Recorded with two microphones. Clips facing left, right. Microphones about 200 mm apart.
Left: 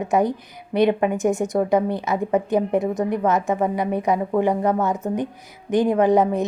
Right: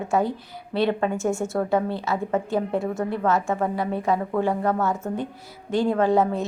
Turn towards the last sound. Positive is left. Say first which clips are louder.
# left 3 dB
turn(degrees=20)  # may be behind; listen again after turning